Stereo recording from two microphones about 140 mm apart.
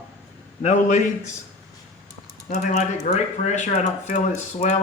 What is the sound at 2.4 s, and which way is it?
Speech, 60° left (ahead or behind).